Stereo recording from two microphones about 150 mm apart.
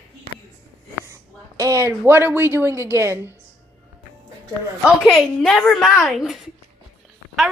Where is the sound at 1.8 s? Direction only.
15° right (ahead or behind).